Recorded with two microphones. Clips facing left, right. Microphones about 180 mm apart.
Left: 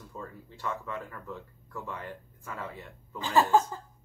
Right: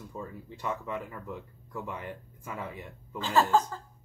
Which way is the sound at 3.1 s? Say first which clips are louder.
Left 1 dB; 15° left (ahead or behind).